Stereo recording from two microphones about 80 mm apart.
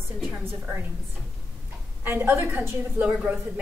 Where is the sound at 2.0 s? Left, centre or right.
Right.